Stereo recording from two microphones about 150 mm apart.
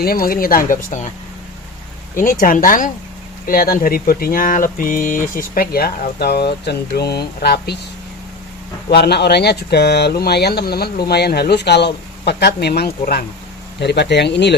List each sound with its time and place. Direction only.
0.0 s speech: 80° left; by 1.0 s 65° left (ahead or behind)
2.1 s speech: 65° left (ahead or behind); by 7.8 s 90° left
8.9 s speech: 90° left